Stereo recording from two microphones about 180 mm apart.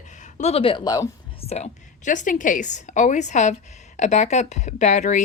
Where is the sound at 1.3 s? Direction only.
35° left (ahead or behind).